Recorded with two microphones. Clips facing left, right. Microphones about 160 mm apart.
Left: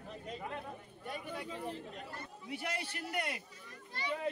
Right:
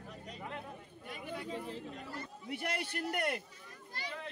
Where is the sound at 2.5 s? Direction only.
55° right (ahead or behind).